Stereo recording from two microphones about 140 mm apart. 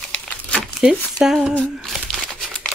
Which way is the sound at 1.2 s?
5° right (ahead or behind).